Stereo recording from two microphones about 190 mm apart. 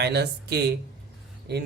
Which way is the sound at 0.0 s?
60° right (ahead or behind).